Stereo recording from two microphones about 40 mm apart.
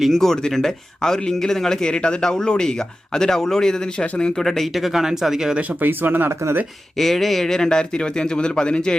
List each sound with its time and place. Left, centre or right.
0.2 s a man's voice: centre
5.8 s speech: right
6.9 s a man's voice: centre; by 9.0 s left